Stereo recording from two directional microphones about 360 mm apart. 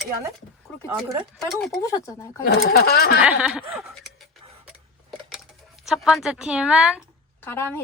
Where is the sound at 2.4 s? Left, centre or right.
Left.